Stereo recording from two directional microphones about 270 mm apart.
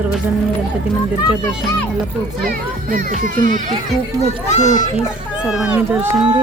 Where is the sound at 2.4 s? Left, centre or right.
Right.